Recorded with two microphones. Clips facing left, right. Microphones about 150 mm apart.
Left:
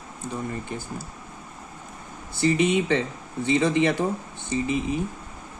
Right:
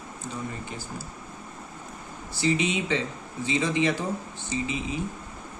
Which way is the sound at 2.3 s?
55° left (ahead or behind).